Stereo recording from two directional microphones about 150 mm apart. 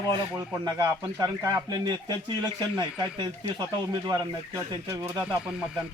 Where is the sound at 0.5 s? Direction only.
25° right (ahead or behind).